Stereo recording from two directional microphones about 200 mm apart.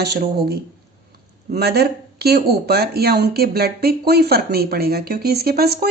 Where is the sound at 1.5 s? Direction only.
55° right (ahead or behind).